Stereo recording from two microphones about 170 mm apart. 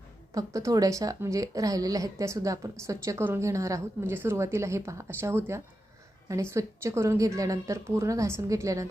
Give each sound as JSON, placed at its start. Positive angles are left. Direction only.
{"t": 0.3, "sound": "a woman's voice", "side_deg": -20}